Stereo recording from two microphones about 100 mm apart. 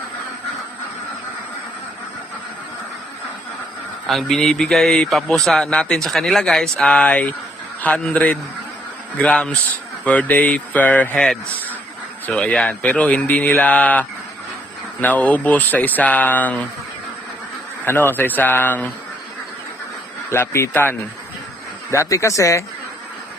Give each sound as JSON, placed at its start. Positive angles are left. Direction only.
{"t": 4.0, "sound": "a man's voice", "side_deg": 0}
{"t": 17.8, "sound": "speech", "side_deg": 20}
{"t": 20.3, "sound": "speech", "side_deg": 25}